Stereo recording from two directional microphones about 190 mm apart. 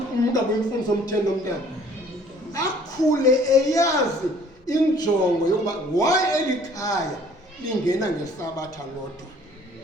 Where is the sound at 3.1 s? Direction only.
20° left (ahead or behind).